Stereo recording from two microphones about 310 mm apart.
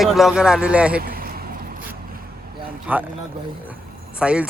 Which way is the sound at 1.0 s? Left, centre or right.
Right.